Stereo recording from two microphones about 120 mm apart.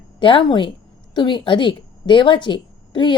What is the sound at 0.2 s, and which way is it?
A woman's voice, 45° left (ahead or behind).